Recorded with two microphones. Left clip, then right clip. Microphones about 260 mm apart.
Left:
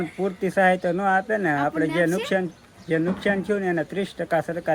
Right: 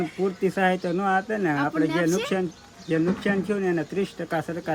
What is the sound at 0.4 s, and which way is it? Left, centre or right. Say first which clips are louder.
Speech: left 5 dB; centre.